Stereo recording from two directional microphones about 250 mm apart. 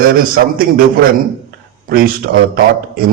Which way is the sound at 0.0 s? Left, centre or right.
Right.